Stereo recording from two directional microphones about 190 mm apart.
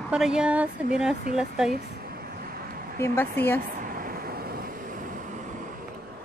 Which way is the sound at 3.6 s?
45° right (ahead or behind).